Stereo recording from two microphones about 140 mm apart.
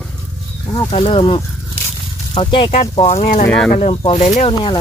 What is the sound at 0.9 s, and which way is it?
Speech, 40° left (ahead or behind).